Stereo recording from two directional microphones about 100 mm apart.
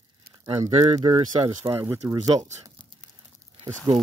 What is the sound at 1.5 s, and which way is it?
Speech, 35° right (ahead or behind).